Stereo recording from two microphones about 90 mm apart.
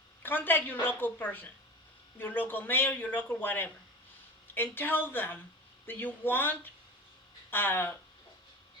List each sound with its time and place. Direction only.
0.2 s a man's voice: 20° left (ahead or behind)